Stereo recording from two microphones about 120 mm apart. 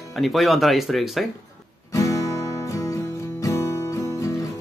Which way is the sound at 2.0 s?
25° left (ahead or behind).